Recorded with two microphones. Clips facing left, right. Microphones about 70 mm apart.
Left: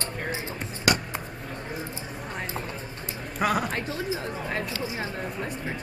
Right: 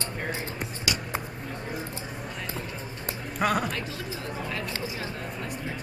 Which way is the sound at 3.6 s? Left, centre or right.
Left.